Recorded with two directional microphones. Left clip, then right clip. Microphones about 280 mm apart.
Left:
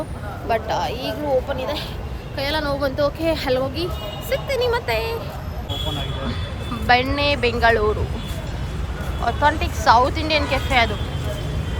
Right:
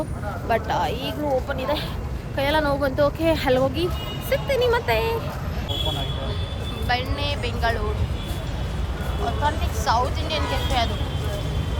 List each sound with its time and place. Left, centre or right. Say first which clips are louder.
0.4 s speech: left 1 dB; centre
6.8 s speech: left 8 dB; centre
9.2 s speech: left 6 dB; centre